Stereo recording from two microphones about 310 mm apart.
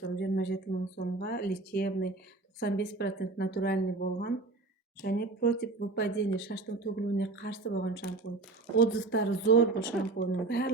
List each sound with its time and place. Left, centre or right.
0.0 s speech: left